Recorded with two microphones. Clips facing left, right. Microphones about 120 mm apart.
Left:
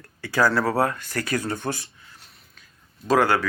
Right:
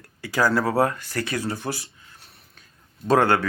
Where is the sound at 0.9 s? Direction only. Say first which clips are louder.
Left 1 dB; 35° right (ahead or behind).